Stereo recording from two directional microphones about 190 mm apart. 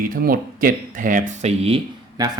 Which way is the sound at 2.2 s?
20° right (ahead or behind).